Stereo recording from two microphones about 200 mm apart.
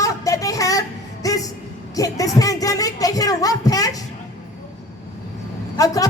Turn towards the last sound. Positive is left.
turn(degrees=15)  # may be behind; listen again after turning